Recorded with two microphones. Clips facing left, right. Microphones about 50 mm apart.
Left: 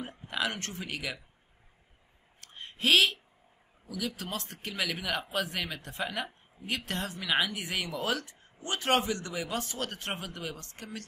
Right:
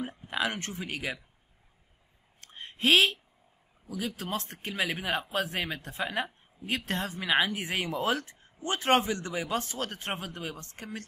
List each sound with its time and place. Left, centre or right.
0.0 s speech: centre
2.4 s a sound: right
3.9 s speech: right